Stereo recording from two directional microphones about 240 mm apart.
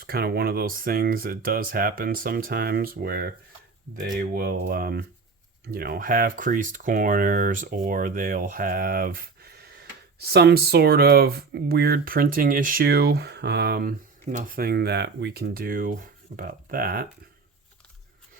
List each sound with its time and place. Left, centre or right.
0.0 s speech: right